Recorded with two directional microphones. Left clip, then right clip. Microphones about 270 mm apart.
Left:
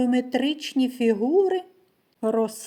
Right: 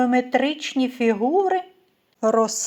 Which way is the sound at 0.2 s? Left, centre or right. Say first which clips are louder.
Right 4 dB; right.